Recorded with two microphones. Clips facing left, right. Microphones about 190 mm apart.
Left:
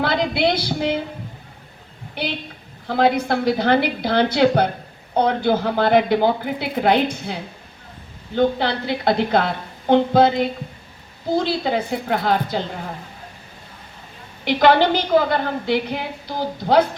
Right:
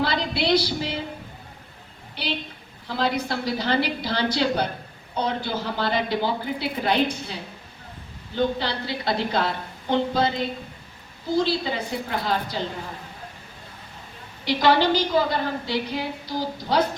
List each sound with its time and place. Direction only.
0.0 s a woman's voice: 55° left (ahead or behind)
2.1 s a woman's voice: 55° left (ahead or behind)
8.4 s a woman's voice: 55° left (ahead or behind)
14.4 s a woman's voice: 55° left (ahead or behind)